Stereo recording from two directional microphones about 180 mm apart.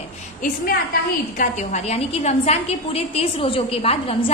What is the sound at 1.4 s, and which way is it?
A woman's voice, 40° left (ahead or behind).